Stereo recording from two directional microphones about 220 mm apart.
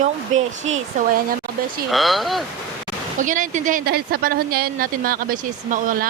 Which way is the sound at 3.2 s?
35° right (ahead or behind).